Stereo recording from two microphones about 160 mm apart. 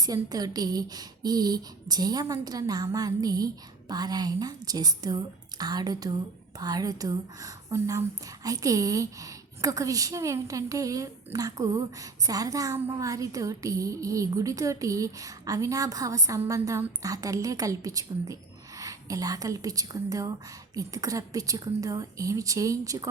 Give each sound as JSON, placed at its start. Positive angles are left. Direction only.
{"t": 0.0, "sound": "a woman's voice", "side_deg": -25}